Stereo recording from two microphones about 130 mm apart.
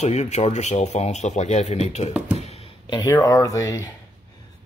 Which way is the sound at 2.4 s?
55° left (ahead or behind).